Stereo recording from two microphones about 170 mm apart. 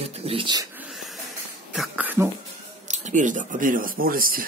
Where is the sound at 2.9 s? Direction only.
45° right (ahead or behind).